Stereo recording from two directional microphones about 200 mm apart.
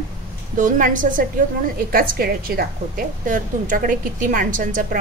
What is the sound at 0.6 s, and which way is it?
A woman's voice, 40° right (ahead or behind).